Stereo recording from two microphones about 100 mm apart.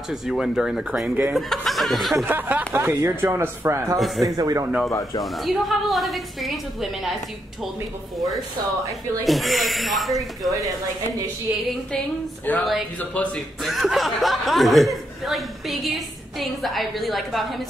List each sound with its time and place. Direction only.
0.1 s speech: centre (ahead or behind)
2.1 s speech: 20° right (ahead or behind); by 4.6 s 35° right (ahead or behind)
4.6 s speech: 5° right (ahead or behind)
9.2 s speech: centre (ahead or behind)
12.5 s speech: 15° left (ahead or behind)
13.6 s speech: centre (ahead or behind)